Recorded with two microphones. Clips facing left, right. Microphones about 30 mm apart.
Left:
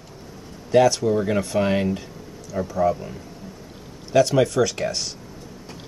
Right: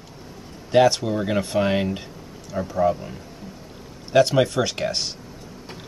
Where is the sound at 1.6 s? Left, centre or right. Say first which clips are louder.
Even; centre.